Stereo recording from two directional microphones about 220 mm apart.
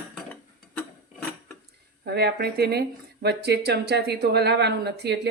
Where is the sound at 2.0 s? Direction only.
45° right (ahead or behind).